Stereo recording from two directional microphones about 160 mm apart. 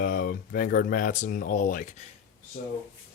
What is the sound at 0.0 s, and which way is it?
Speech, 60° left (ahead or behind).